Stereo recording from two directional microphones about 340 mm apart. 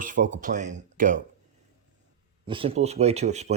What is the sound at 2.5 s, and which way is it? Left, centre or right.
Speech, centre.